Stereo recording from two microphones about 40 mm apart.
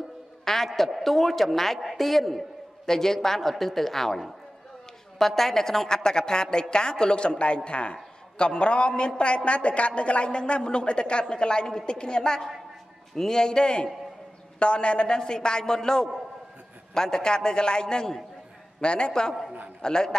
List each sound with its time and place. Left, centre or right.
0.5 s a woman's voice: centre